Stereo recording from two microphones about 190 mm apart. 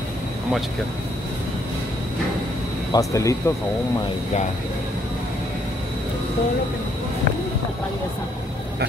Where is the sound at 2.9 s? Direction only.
15° left (ahead or behind).